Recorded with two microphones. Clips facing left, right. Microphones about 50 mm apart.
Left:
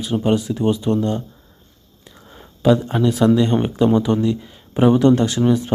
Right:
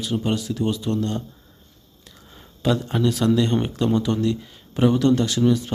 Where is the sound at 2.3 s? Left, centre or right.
Centre.